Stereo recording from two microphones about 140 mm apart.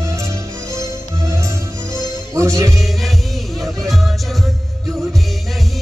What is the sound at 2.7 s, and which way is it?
Music, centre (ahead or behind).